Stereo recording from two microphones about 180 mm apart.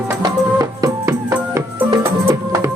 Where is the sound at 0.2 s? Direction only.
20° right (ahead or behind).